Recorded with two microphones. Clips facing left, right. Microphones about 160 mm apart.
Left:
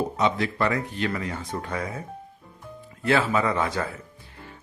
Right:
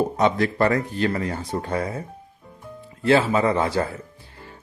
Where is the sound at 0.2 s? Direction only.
45° right (ahead or behind).